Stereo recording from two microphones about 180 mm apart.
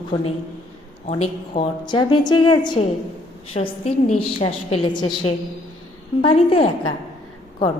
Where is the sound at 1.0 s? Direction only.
35° left (ahead or behind).